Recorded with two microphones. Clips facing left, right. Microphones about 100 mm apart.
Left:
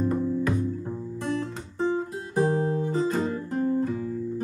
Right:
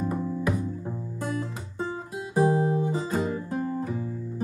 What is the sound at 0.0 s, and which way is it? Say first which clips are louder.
Music: left 3 dB; 10° right (ahead or behind).